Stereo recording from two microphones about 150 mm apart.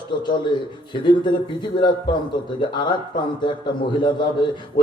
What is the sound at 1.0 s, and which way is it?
Speech, 30° left (ahead or behind).